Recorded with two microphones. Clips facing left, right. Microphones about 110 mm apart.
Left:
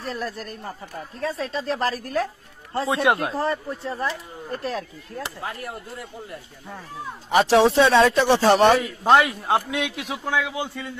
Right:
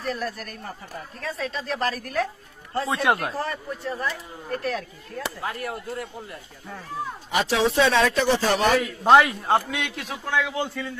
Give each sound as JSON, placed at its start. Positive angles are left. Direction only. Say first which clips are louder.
{"t": 0.0, "sound": "speech", "louder": "right 1 dB", "side_deg": 30}
{"t": 7.2, "sound": "speech", "louder": "left 6 dB", "side_deg": 40}
{"t": 8.7, "sound": "a man's voice", "louder": "right 1 dB", "side_deg": 0}